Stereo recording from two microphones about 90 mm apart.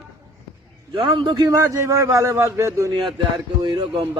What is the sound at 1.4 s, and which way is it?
Speech, 35° right (ahead or behind).